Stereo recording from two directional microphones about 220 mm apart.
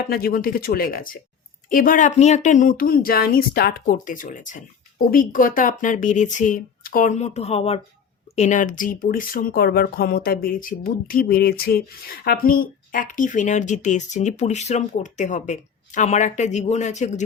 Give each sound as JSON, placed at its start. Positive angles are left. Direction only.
{"t": 0.1, "sound": "speech", "side_deg": 45}